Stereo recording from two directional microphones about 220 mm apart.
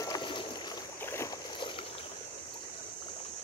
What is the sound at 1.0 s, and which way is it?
Boat, 10° left (ahead or behind).